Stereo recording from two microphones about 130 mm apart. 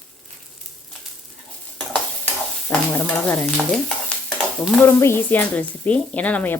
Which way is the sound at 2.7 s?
10° left (ahead or behind).